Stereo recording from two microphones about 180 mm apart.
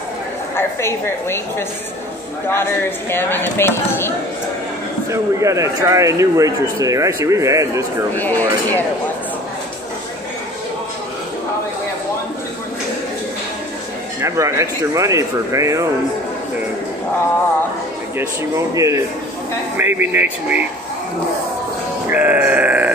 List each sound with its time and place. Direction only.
0.6 s speech: 15° left (ahead or behind)
2.4 s speech: 10° left (ahead or behind)
5.1 s speech: 15° right (ahead or behind)
8.2 s speech: 10° left (ahead or behind)
14.2 s speech: 15° right (ahead or behind)
18.1 s speech: 15° right (ahead or behind)
22.1 s grunt: 10° right (ahead or behind)